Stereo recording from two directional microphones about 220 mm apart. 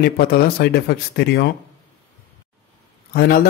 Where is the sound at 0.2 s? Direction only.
45° left (ahead or behind).